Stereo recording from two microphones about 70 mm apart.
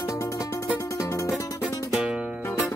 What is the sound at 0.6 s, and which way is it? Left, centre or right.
Music, left.